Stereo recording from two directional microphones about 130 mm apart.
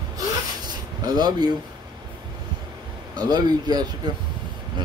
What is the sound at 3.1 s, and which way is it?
Speech, 30° right (ahead or behind).